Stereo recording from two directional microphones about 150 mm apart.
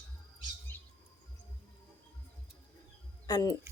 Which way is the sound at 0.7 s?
15° left (ahead or behind).